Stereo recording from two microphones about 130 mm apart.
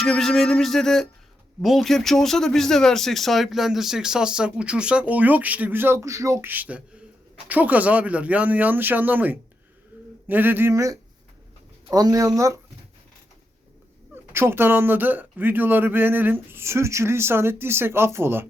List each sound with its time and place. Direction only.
0.0 s speech: 5° left (ahead or behind); by 9.4 s 15° right (ahead or behind)
9.9 s a sound: 10° right (ahead or behind)
10.2 s speech: 15° right (ahead or behind)
14.3 s speech: 20° right (ahead or behind)